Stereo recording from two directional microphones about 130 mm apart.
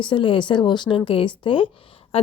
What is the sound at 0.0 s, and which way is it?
A woman's voice, 40° left (ahead or behind).